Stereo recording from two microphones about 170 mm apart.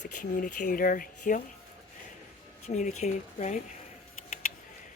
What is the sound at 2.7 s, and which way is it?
Speech, 45° left (ahead or behind).